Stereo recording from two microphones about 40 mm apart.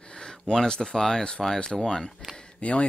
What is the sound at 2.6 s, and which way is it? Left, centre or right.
Speech, left.